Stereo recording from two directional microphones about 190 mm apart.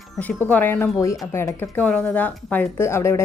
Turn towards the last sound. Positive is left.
turn(degrees=15)  # may be behind; listen again after turning